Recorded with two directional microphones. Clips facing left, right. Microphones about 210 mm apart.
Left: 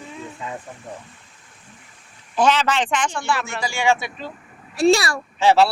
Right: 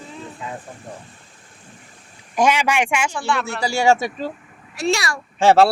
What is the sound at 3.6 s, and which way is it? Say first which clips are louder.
Speech: right 4 dB; 40° right (ahead or behind).